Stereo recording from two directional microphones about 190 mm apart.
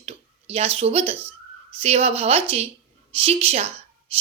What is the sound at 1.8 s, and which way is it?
A woman's voice, 35° right (ahead or behind).